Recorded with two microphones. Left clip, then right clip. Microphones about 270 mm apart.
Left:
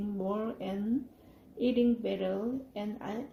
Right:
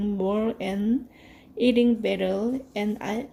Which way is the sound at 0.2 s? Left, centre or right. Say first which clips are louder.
Right 8 dB; right.